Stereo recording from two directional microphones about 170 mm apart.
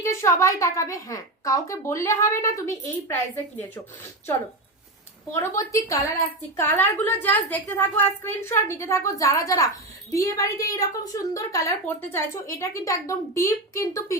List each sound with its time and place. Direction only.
0.0 s a woman's voice: 15° left (ahead or behind)
5.3 s a woman's voice: 15° left (ahead or behind)